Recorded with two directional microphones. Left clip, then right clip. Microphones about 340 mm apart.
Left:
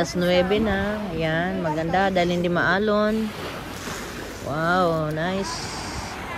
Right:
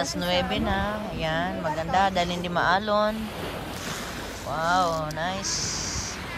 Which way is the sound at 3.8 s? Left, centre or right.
Right.